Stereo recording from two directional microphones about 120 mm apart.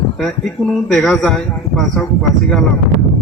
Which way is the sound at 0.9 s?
Centre (ahead or behind).